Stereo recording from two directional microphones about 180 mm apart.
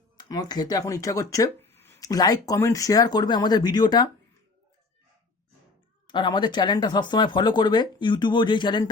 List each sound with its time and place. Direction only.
0.3 s speech: 20° left (ahead or behind)
6.1 s speech: 25° left (ahead or behind)